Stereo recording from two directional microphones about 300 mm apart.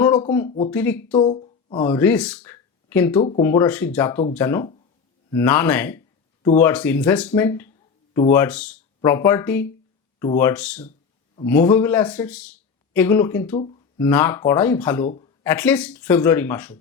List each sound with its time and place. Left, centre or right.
0.3 s speech: centre
1.1 s speech: centre
1.8 s speech: centre
3.2 s speech: centre
13.6 s a sound: centre
14.1 s speech: centre
15.0 s speech: left
15.4 s speech: centre